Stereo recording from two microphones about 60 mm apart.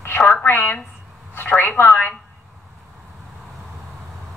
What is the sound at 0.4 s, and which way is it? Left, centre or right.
A woman's voice, left.